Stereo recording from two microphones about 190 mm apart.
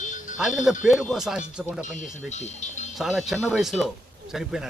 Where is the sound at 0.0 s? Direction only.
40° left (ahead or behind).